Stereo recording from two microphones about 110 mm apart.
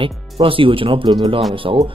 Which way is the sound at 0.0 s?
55° right (ahead or behind).